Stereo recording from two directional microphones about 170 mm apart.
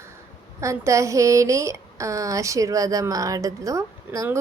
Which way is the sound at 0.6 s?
15° right (ahead or behind).